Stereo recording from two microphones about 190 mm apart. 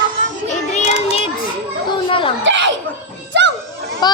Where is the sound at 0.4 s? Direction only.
40° left (ahead or behind).